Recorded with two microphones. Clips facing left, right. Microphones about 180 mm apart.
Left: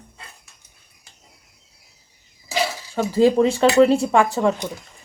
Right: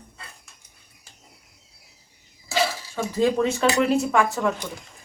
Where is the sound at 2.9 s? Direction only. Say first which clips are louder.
Left 6 dB; 30° left (ahead or behind).